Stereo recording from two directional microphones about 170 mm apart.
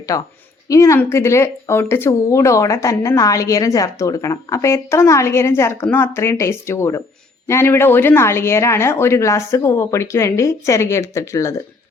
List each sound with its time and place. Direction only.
0.1 s a woman's voice: 20° left (ahead or behind)